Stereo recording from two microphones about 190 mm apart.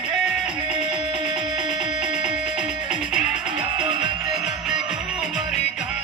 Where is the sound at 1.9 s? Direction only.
40° left (ahead or behind).